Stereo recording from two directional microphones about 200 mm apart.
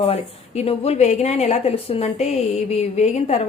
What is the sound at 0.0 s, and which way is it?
A woman's voice, 30° left (ahead or behind).